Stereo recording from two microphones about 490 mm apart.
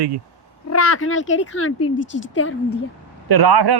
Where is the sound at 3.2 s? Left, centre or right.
Right.